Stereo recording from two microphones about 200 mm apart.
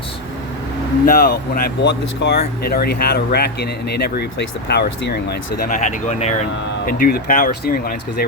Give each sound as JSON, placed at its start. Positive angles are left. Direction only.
{"t": 1.0, "sound": "speech", "side_deg": 45}